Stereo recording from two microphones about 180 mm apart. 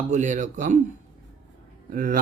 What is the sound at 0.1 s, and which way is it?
Speech, 45° right (ahead or behind).